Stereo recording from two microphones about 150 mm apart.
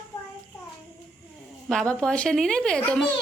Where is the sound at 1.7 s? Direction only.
5° left (ahead or behind).